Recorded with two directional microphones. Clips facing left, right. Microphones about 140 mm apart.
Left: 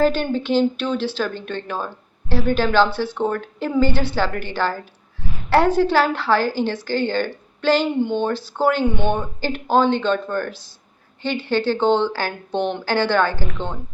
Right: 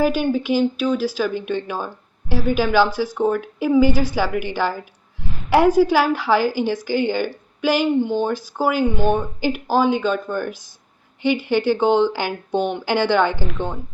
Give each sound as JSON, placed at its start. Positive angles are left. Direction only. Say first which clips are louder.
{"t": 0.0, "sound": "speech", "louder": "even", "side_deg": -10}
{"t": 13.5, "sound": "speech", "louder": "right 2 dB", "side_deg": -5}